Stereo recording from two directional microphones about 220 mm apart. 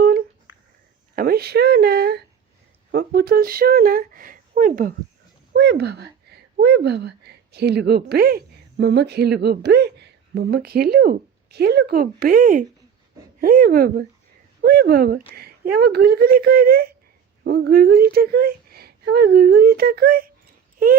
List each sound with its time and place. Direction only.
1.1 s a sound: 45° right (ahead or behind)
2.9 s speech: 45° right (ahead or behind)
5.5 s speech: 50° right (ahead or behind)